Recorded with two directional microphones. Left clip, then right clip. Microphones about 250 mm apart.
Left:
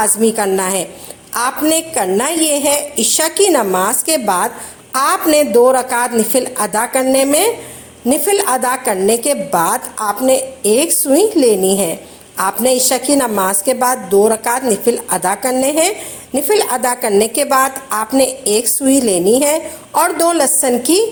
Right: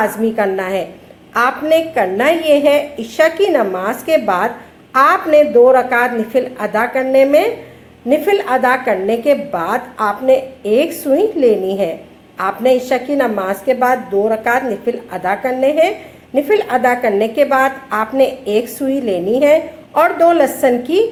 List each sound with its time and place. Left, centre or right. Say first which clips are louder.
0.0 s a woman's voice: left 1 dB; left